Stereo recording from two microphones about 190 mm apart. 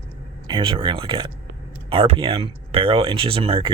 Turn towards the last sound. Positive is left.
turn(degrees=-30)  # may be behind; listen again after turning